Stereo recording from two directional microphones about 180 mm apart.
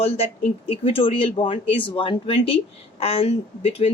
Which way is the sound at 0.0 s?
35° left (ahead or behind).